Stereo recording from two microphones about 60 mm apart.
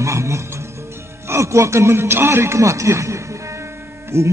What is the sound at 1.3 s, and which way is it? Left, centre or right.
A man's voice, right.